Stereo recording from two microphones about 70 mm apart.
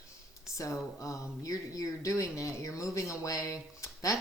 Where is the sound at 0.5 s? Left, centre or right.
Left.